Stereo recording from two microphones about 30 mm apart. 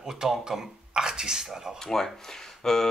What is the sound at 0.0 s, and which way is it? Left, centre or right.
Speech, centre.